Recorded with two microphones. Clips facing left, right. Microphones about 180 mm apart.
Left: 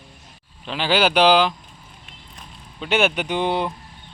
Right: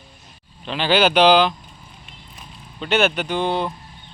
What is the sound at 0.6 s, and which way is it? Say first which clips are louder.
Speech: right 2 dB; 10° left (ahead or behind).